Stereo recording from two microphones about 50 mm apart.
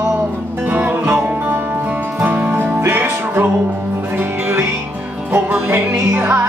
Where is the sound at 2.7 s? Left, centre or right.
Right.